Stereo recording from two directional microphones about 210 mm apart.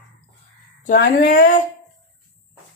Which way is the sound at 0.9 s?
40° left (ahead or behind).